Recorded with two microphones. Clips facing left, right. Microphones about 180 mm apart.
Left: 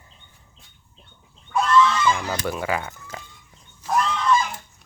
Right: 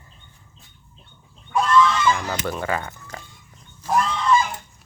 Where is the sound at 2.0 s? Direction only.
Centre (ahead or behind).